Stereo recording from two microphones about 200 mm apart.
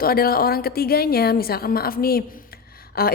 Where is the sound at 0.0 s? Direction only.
50° left (ahead or behind).